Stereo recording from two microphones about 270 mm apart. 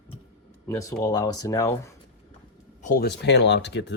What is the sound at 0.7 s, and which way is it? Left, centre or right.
Speech, centre.